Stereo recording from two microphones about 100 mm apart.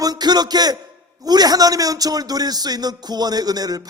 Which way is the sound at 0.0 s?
45° right (ahead or behind).